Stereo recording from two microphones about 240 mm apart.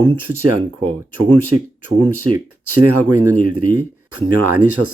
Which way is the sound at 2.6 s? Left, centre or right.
Right.